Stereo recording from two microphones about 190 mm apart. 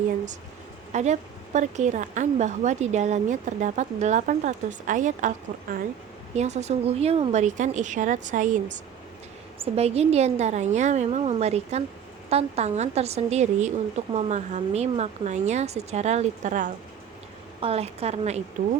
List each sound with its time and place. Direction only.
0.9 s a woman's voice: 40° right (ahead or behind)
9.6 s a woman's voice: 35° right (ahead or behind)